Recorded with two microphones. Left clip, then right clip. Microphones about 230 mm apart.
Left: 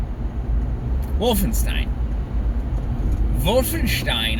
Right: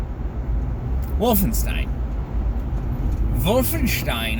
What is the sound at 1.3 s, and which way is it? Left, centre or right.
Speech, centre.